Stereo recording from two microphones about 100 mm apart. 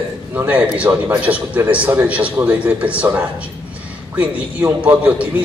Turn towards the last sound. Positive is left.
turn(degrees=-15)  # may be behind; listen again after turning